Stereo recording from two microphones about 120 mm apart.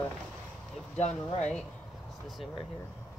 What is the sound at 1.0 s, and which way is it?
Speech, 70° left (ahead or behind).